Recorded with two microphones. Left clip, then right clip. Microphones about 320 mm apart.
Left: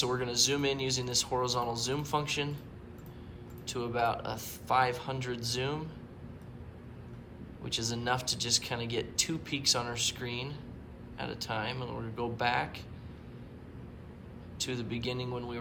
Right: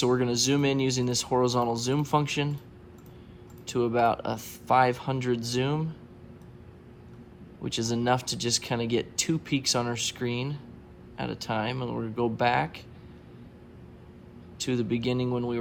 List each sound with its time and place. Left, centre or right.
0.0 s speech: right
3.7 s speech: centre
7.6 s speech: right
14.6 s speech: right